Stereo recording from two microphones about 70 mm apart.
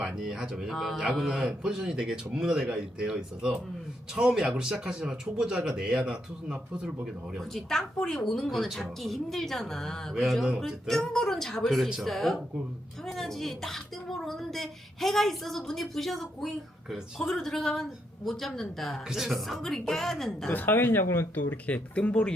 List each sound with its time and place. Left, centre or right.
0.2 s speech: centre
0.7 s a woman's voice: centre
1.3 s speech: centre
7.3 s a woman's voice: centre
20.5 s speech: left
21.9 s speech: centre